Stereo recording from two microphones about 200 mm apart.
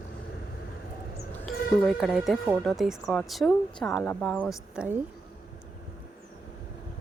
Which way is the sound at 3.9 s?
15° left (ahead or behind).